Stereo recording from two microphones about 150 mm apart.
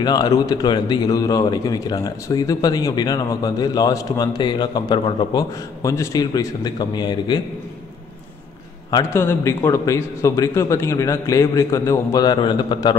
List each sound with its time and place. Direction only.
0.0 s speech: 25° left (ahead or behind)
8.9 s speech: 15° left (ahead or behind)